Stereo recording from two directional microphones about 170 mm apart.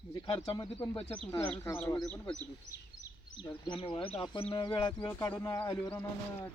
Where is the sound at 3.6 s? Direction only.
30° left (ahead or behind).